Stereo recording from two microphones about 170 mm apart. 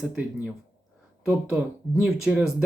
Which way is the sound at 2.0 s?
Centre (ahead or behind).